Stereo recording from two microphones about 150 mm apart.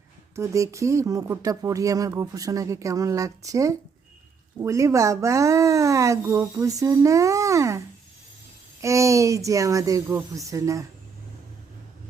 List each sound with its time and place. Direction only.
0.3 s speech: 20° right (ahead or behind)
8.8 s speech: 20° right (ahead or behind)